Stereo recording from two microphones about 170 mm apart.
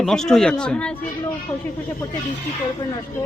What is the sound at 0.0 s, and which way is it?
Speech, 5° left (ahead or behind).